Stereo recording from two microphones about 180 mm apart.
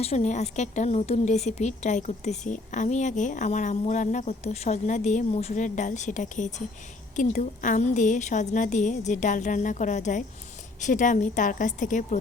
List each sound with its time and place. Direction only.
0.0 s a woman's voice: 35° left (ahead or behind)